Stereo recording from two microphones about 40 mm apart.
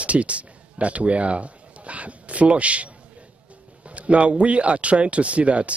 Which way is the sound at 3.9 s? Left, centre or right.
Right.